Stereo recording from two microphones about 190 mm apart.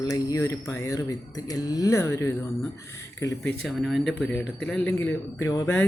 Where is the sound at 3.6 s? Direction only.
Centre (ahead or behind); by 5.8 s 15° left (ahead or behind).